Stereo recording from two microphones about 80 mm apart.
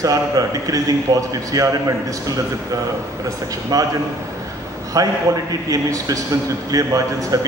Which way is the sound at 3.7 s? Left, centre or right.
Right.